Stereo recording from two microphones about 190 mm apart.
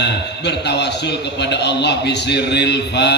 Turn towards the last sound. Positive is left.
turn(degrees=65)  # may be behind; listen again after turning